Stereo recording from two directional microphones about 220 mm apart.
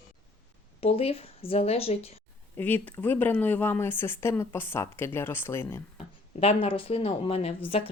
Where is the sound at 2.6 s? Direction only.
10° left (ahead or behind).